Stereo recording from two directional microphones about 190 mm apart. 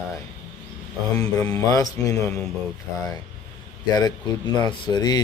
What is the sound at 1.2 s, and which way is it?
Speech, 15° left (ahead or behind).